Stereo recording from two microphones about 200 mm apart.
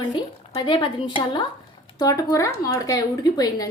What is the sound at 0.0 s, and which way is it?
A woman's voice, 25° left (ahead or behind).